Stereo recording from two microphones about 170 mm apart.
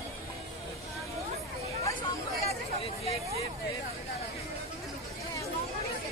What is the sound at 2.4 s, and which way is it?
Chatter, 35° left (ahead or behind).